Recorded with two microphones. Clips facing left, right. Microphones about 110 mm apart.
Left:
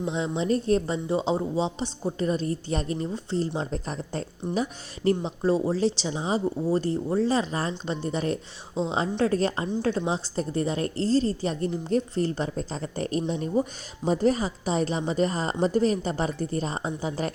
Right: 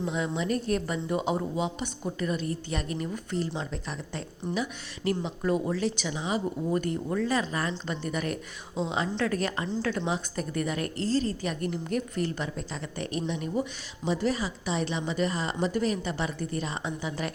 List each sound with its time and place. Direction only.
0.0 s speech: 30° left (ahead or behind)